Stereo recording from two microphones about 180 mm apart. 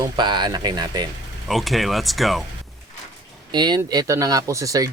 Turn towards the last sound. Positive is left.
turn(degrees=-20)  # may be behind; listen again after turning